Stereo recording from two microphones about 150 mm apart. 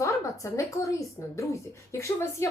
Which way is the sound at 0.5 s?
20° left (ahead or behind).